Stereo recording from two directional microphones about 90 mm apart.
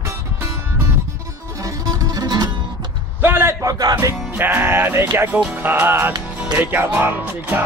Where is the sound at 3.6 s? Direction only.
45° right (ahead or behind).